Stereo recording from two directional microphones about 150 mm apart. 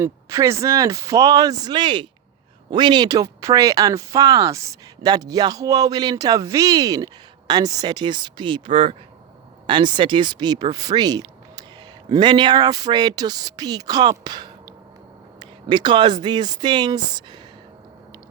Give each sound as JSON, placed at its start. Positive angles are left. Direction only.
{"t": 0.0, "sound": "speech", "side_deg": -20}